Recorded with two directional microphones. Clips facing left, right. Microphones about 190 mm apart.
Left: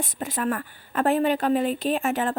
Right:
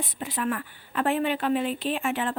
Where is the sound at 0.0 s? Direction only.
45° left (ahead or behind).